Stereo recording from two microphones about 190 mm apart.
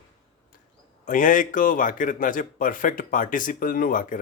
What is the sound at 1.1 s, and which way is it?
Speech, 45° left (ahead or behind).